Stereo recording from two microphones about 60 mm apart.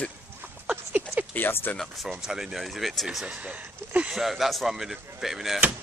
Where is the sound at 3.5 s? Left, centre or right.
Right.